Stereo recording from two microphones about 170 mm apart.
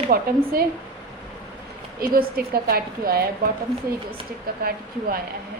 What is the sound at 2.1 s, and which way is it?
A woman's voice, 60° right (ahead or behind).